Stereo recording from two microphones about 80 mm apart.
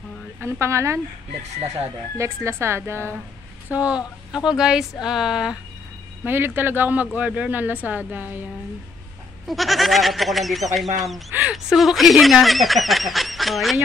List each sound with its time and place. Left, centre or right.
0.4 s a woman's voice: right
2.1 s a woman's voice: right
3.7 s speech: centre
6.2 s speech: right
9.5 s speech: centre